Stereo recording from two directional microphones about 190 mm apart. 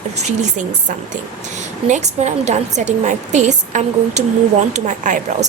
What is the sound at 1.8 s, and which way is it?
A woman's voice, 40° right (ahead or behind).